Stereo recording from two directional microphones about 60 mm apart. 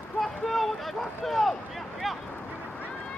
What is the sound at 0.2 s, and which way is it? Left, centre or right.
Vehicle, centre.